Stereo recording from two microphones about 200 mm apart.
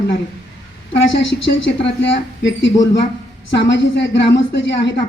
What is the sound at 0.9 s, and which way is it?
A woman's voice, 65° left (ahead or behind).